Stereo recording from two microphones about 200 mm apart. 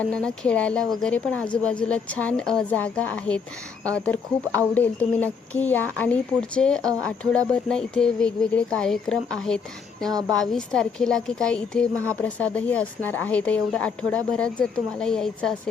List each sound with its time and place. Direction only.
0.0 s a woman's voice: 5° left (ahead or behind)
10.1 s a woman's voice: 20° right (ahead or behind)
10.3 s a woman's voice: centre (ahead or behind)